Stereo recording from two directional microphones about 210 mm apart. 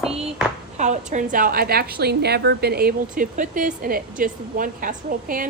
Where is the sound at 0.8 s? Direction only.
35° right (ahead or behind).